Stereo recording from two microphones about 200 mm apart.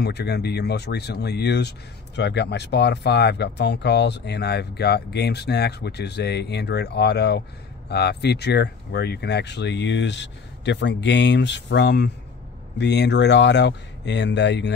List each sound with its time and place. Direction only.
0.0 s speech: 55° left (ahead or behind)